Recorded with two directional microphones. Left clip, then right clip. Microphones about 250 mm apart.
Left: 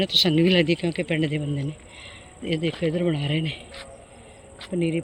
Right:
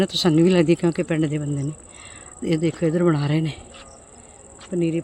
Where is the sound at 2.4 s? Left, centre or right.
Right.